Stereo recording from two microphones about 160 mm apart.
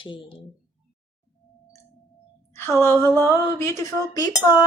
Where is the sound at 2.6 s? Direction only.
15° left (ahead or behind).